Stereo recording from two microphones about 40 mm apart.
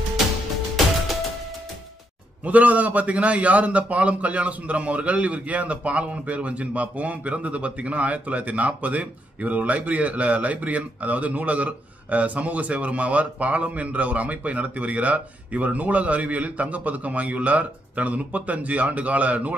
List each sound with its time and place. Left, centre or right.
2.4 s a man's voice: right